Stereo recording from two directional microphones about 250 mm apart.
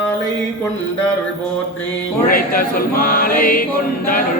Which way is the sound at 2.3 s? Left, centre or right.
Left.